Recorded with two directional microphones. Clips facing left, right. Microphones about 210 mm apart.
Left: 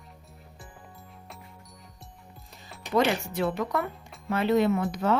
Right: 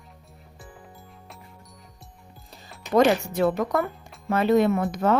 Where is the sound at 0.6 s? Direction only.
Centre (ahead or behind).